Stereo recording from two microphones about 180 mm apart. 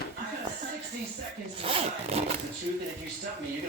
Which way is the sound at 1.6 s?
35° right (ahead or behind).